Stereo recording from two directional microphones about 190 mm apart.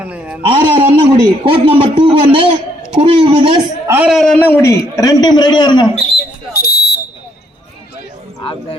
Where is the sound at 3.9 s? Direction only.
5° right (ahead or behind); by 5.8 s 25° left (ahead or behind).